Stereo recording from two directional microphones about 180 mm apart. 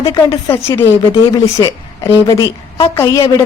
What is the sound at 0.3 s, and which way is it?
A woman's voice, 15° left (ahead or behind).